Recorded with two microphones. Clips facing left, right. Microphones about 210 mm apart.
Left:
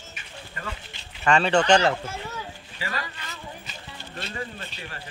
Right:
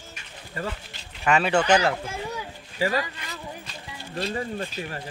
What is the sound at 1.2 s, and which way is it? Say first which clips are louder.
Speech: left 1 dB; 10° right (ahead or behind).